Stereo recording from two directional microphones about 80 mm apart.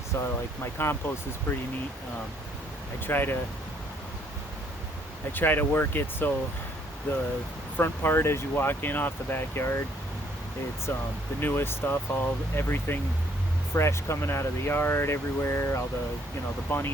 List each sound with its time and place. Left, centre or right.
0.1 s speech: left
3.1 s speech: left
5.3 s speech: left
10.9 s speech: left